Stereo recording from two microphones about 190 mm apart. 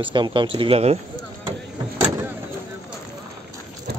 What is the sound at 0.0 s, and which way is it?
Speech, 25° right (ahead or behind).